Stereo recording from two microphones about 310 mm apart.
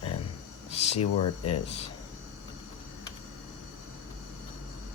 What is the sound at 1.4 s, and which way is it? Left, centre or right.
Speech, centre.